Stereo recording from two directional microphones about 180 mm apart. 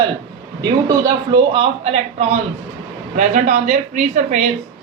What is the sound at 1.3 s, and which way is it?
A woman's voice, 30° right (ahead or behind).